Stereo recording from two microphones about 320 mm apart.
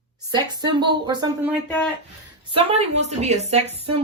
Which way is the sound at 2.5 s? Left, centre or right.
Centre.